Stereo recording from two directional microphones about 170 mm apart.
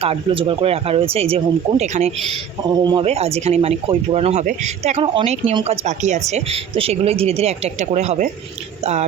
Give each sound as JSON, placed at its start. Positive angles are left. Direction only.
{"t": 0.0, "sound": "speech", "side_deg": -35}
{"t": 2.6, "sound": "a man's voice", "side_deg": -25}
{"t": 3.0, "sound": "speech", "side_deg": -35}